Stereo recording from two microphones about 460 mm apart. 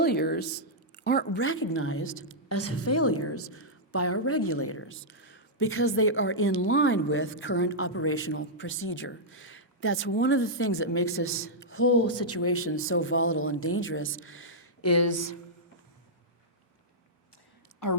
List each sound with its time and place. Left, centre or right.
0.0 s a woman's voice: left
17.8 s a woman's voice: left